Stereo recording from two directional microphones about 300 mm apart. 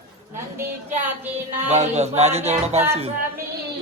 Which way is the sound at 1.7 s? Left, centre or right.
Right.